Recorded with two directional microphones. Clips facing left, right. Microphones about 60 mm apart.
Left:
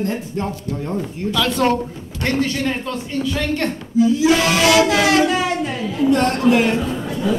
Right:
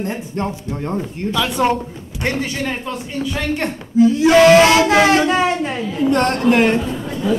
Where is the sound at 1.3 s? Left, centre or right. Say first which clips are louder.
Even; centre.